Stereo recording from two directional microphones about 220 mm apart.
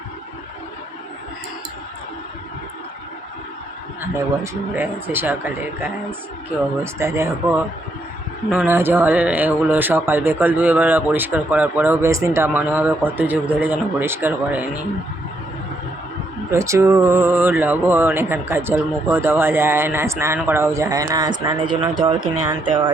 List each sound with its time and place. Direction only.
4.7 s speech: 10° right (ahead or behind)
16.5 s speech: 15° right (ahead or behind)